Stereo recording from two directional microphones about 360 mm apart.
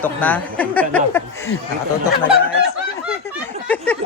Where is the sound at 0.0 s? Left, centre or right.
Centre.